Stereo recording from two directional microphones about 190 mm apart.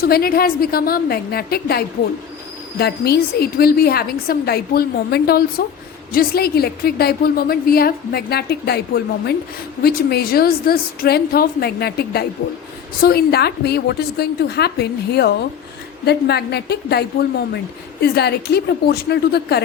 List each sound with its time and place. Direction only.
0.0 s a woman's voice: 50° left (ahead or behind)